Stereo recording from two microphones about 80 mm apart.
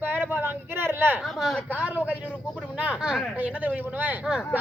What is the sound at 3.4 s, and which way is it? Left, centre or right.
Speech, centre.